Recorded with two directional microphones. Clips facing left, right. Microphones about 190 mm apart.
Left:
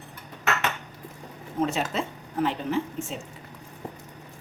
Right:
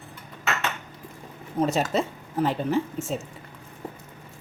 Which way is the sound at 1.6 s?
40° right (ahead or behind).